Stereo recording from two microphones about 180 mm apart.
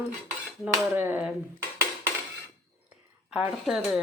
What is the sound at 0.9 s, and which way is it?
Speech, 10° right (ahead or behind).